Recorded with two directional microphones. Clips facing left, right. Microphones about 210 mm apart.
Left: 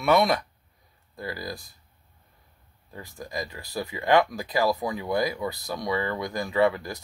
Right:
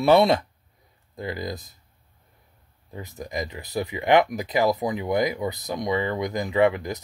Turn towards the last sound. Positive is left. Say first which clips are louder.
# right 2 dB
turn(degrees=-20)  # may be behind; listen again after turning